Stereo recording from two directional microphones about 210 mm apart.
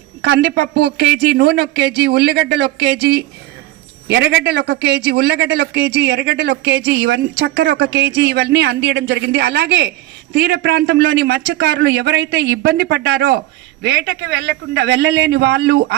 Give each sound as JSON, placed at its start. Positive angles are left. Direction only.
{"t": 0.2, "sound": "speech", "side_deg": -50}